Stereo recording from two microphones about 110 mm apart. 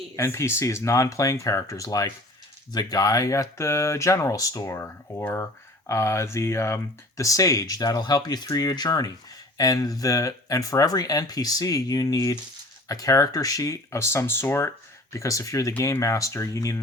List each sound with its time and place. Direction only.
0.2 s speech: 25° left (ahead or behind)